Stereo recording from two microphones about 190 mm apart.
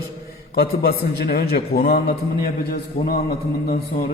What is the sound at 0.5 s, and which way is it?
A man's voice, 55° left (ahead or behind).